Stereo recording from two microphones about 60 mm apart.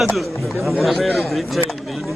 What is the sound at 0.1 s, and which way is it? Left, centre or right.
A man's voice, centre.